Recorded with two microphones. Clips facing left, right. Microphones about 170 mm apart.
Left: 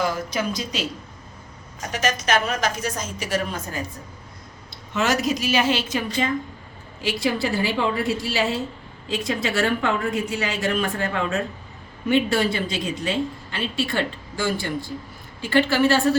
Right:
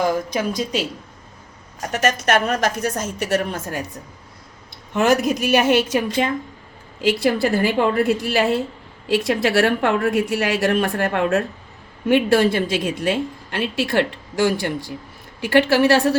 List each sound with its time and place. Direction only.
0.0 s a woman's voice: 50° right (ahead or behind)
1.9 s a woman's voice: 60° right (ahead or behind)
4.9 s a woman's voice: 55° right (ahead or behind)
9.0 s a woman's voice: 65° right (ahead or behind)